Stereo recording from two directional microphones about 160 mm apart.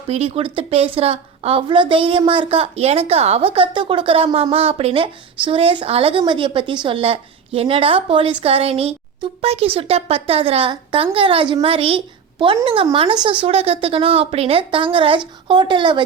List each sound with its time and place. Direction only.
0.1 s a woman's voice: 40° right (ahead or behind)